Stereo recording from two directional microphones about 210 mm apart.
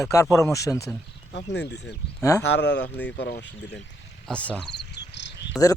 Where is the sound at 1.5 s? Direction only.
55° left (ahead or behind).